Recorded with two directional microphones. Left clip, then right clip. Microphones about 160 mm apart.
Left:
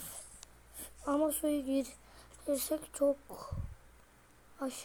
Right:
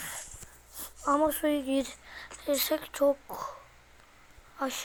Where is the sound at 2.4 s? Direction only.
15° left (ahead or behind).